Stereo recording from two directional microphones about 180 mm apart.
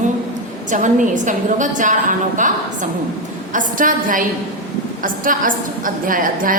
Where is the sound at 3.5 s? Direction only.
50° right (ahead or behind).